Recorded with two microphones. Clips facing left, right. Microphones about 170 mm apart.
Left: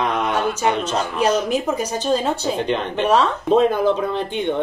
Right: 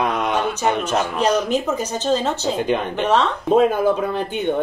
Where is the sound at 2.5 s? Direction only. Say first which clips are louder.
Right 1 dB; 10° right (ahead or behind).